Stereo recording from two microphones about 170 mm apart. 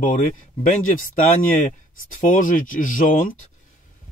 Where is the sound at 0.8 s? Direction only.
50° left (ahead or behind).